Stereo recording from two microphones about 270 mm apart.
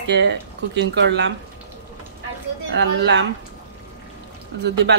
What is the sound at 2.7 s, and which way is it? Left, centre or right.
Speech, right.